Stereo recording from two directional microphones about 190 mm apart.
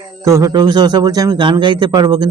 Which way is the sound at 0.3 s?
15° right (ahead or behind).